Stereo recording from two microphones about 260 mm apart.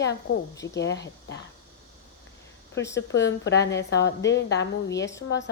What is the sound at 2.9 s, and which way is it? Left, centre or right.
A woman's voice, left.